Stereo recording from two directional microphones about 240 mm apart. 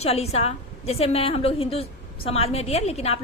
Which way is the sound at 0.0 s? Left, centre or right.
Left.